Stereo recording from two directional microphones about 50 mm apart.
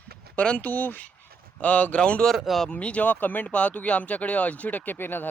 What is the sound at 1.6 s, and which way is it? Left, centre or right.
Speech, left.